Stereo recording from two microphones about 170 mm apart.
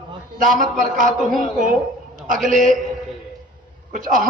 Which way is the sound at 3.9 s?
50° right (ahead or behind).